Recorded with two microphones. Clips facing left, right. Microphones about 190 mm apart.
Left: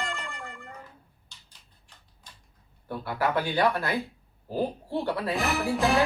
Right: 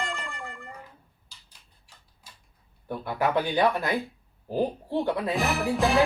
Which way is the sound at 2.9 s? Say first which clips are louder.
Right 1 dB; 20° right (ahead or behind).